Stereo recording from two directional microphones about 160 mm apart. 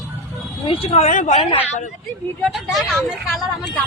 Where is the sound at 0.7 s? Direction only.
40° left (ahead or behind).